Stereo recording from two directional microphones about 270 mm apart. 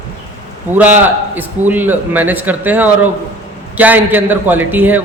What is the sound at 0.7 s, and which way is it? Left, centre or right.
A man's voice, centre.